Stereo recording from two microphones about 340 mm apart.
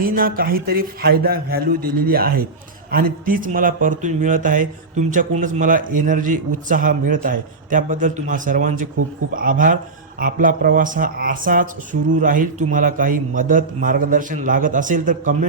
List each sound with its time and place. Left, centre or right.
0.0 s speech: right